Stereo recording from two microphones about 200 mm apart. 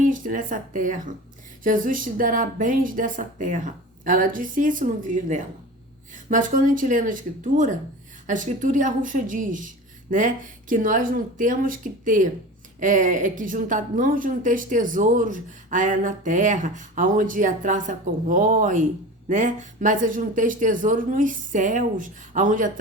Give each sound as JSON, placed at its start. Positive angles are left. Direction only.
{"t": 0.0, "sound": "a woman's voice", "side_deg": -40}